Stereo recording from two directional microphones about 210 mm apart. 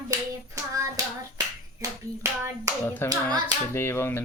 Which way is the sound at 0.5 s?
15° right (ahead or behind).